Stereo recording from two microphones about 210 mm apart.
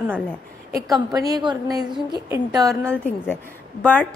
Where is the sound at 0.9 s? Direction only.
15° right (ahead or behind).